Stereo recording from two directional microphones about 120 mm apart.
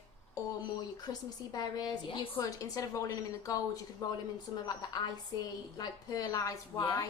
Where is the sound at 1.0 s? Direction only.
35° left (ahead or behind).